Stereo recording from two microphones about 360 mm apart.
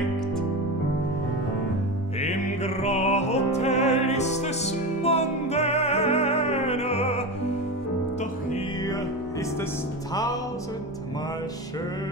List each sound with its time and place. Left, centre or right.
2.2 s music: centre